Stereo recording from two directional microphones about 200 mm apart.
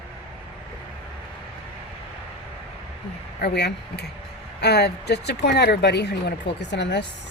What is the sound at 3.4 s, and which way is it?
Speech, 55° left (ahead or behind).